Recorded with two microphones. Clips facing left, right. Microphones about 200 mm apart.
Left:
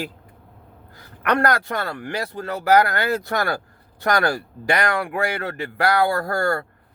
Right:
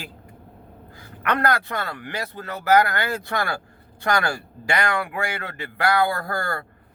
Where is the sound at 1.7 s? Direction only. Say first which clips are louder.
Left 3 dB; 50° left (ahead or behind).